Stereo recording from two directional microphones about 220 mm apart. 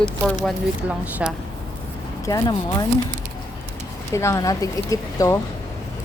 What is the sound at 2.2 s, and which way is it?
Speech, 15° left (ahead or behind).